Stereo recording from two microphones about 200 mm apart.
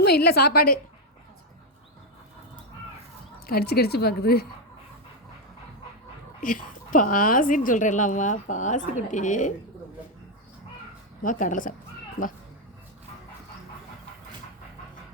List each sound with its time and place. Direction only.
0.0 s speech: 55° left (ahead or behind)
3.4 s speech: 50° left (ahead or behind)
6.4 s a woman's voice: 40° left (ahead or behind)
11.2 s a woman's voice: 40° left (ahead or behind)